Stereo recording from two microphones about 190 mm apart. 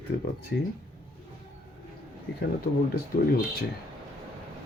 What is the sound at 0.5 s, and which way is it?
Speech, 70° left (ahead or behind).